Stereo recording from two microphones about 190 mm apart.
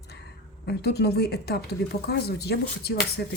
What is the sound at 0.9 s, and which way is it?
Speech, 60° left (ahead or behind).